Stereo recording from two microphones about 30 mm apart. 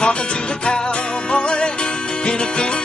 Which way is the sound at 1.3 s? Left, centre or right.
Left.